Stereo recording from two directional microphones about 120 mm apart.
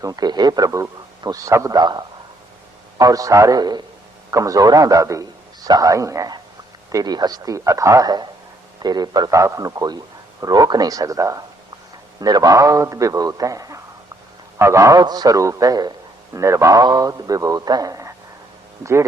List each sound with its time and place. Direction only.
0.0 s a man's voice: 30° right (ahead or behind)